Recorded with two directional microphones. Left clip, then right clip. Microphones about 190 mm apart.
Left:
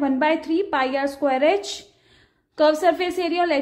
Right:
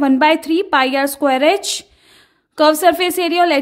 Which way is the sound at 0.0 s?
40° right (ahead or behind).